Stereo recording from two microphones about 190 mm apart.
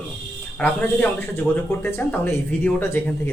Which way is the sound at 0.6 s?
10° left (ahead or behind).